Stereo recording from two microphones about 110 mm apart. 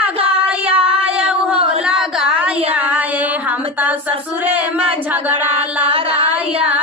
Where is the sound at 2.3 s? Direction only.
10° right (ahead or behind).